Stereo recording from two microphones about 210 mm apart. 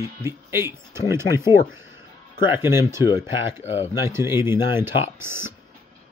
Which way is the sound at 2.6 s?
10° right (ahead or behind).